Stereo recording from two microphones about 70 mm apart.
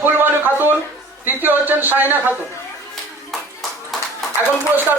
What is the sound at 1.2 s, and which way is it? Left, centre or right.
A man's voice, right.